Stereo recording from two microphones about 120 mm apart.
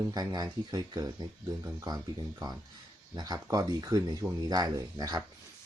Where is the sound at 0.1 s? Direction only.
35° right (ahead or behind).